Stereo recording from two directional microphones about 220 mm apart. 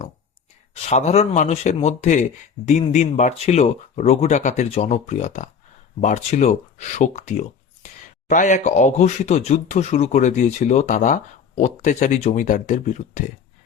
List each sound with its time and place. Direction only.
0.7 s speech: 30° left (ahead or behind)